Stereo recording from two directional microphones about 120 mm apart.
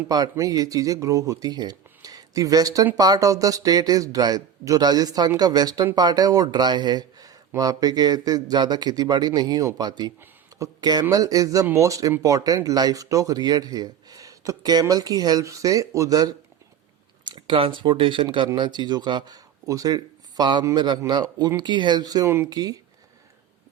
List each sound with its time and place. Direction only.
0.1 s speech: 30° right (ahead or behind)
10.2 s a sound: 30° right (ahead or behind)
11.1 s speech: 30° right (ahead or behind)
22.3 s speech: 20° right (ahead or behind)